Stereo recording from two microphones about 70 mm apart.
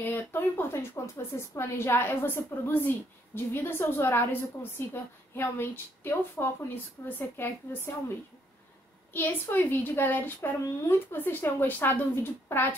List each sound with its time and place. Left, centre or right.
0.0 s a woman's voice: left
9.1 s a woman's voice: left